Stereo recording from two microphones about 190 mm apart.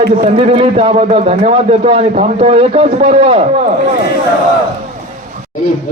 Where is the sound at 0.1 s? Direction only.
35° right (ahead or behind).